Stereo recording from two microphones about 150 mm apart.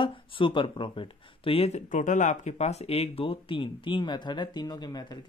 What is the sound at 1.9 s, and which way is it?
Speech, 55° left (ahead or behind).